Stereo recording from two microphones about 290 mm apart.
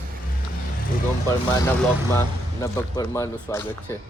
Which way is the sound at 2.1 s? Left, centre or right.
Centre.